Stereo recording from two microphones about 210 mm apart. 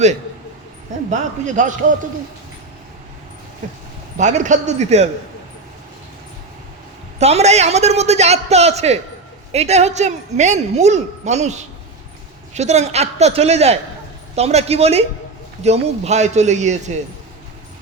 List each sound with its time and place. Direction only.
1.1 s a woman's voice: 35° right (ahead or behind)
4.2 s a woman's voice: 35° right (ahead or behind)
7.2 s a woman's voice: 30° right (ahead or behind)